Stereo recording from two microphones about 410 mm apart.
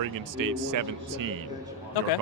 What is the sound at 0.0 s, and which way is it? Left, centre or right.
Speech, right.